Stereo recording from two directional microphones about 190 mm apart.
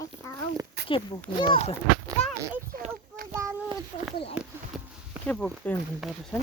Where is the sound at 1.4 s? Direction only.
25° left (ahead or behind).